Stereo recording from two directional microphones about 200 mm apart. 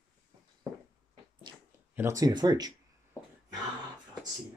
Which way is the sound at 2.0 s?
15° right (ahead or behind).